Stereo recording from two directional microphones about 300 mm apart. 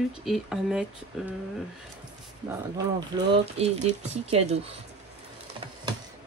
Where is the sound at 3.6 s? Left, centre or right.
Right.